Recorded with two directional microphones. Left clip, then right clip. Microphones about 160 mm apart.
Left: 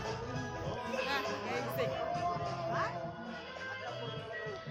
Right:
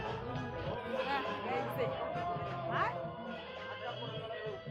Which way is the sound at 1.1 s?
Centre (ahead or behind).